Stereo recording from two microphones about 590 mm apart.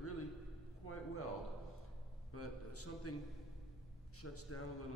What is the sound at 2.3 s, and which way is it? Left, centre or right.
Speech, left.